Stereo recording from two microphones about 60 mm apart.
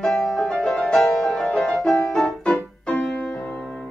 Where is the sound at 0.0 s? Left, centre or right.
Centre.